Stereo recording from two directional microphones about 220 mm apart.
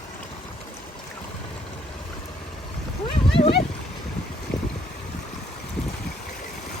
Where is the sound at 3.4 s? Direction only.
25° left (ahead or behind).